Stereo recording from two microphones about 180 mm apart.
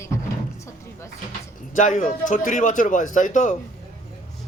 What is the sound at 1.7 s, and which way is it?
Speech, 45° left (ahead or behind).